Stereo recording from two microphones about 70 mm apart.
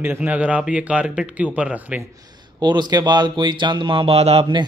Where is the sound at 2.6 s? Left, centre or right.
Right.